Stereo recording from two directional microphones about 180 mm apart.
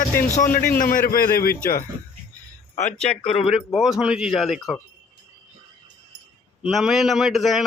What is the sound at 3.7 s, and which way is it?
A man's voice, centre (ahead or behind).